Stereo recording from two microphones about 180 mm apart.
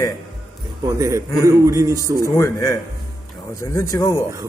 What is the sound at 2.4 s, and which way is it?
A man's voice, 15° left (ahead or behind).